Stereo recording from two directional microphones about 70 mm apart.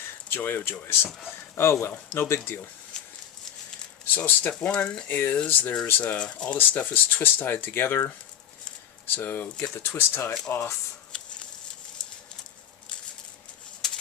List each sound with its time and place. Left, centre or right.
0.3 s speech: left
2.9 s a sound: centre
4.1 s speech: left
4.7 s speech: centre
6.1 s speech: centre
9.7 s speech: left
11.1 s a sound: centre
13.8 s pigeon: centre